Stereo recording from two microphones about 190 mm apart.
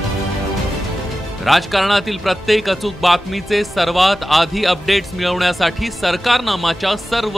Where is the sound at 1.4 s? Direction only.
Centre (ahead or behind).